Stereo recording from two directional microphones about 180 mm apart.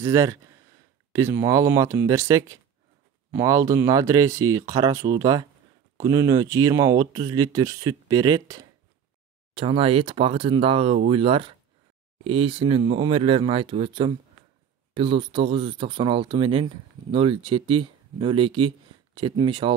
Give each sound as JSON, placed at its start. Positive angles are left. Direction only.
{"t": 0.0, "sound": "speech", "side_deg": -15}